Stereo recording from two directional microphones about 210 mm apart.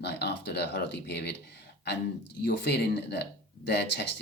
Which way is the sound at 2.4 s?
55° left (ahead or behind).